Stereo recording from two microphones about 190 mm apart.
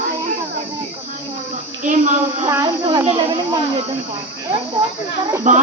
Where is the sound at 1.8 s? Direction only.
40° right (ahead or behind).